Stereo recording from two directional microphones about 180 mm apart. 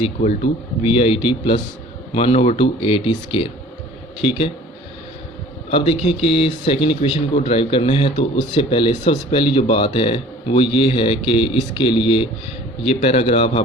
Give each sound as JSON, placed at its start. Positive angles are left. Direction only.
{"t": 0.0, "sound": "speech", "side_deg": 40}
{"t": 5.7, "sound": "speech", "side_deg": 30}